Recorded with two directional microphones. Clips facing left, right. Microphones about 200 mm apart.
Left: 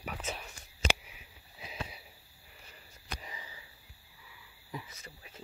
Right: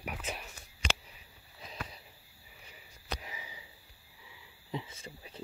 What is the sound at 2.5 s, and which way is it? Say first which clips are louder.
Sniff: even; 5° right (ahead or behind).